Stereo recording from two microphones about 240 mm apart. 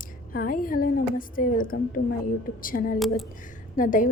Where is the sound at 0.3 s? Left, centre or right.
Left.